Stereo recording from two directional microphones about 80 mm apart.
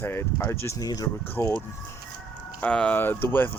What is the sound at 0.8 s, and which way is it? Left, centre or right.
Speech, left.